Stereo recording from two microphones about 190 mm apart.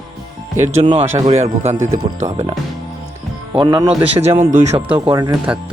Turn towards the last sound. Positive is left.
turn(degrees=-15)  # may be behind; listen again after turning